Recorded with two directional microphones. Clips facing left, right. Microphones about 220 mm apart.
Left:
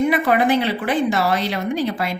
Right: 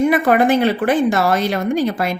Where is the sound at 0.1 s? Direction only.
50° right (ahead or behind).